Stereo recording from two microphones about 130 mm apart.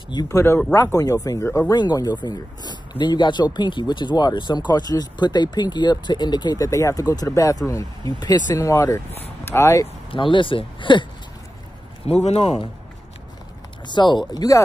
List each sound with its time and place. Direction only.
0.1 s speech: 30° left (ahead or behind)
10.1 s speech: 40° left (ahead or behind)
12.1 s speech: 55° left (ahead or behind)
13.8 s speech: 35° left (ahead or behind)